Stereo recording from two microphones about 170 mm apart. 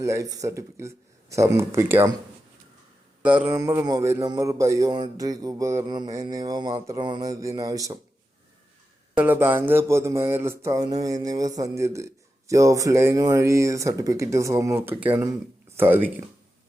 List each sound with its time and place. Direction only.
0.0 s speech: 20° right (ahead or behind)
3.2 s a man's voice: 10° right (ahead or behind)
9.1 s a man's voice: 10° right (ahead or behind)